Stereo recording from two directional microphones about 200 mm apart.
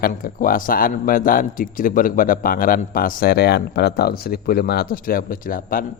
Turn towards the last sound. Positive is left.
turn(degrees=45)  # may be behind; listen again after turning